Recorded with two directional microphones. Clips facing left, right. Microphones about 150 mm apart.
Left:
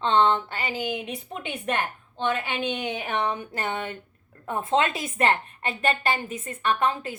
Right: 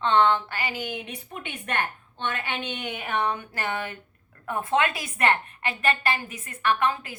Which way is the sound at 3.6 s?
25° left (ahead or behind).